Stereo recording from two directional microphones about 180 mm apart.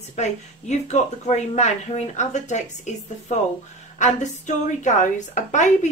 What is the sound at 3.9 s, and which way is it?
A woman's voice, 40° left (ahead or behind).